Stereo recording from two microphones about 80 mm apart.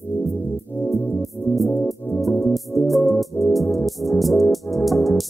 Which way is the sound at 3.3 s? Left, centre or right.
Left.